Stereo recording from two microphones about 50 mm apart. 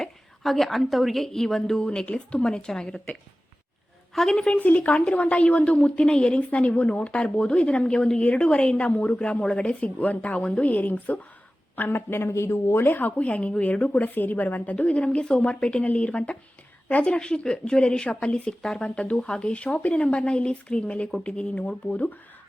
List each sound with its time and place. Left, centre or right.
0.0 s a woman's voice: centre
4.1 s a woman's voice: centre
4.4 s a woman's voice: left
6.5 s a woman's voice: left
11.8 s speech: left
12.3 s speech: left
12.8 s a woman's voice: left
14.0 s a woman's voice: left
14.8 s a woman's voice: left